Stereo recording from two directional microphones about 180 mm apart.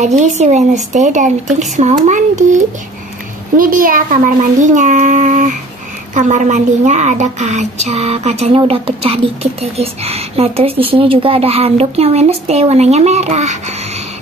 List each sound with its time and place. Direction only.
0.0 s a child's voice: 40° right (ahead or behind)
3.5 s a child's voice: 50° right (ahead or behind)